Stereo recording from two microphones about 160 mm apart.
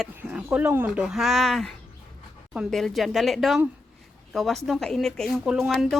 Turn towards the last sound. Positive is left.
turn(degrees=-5)  # may be behind; listen again after turning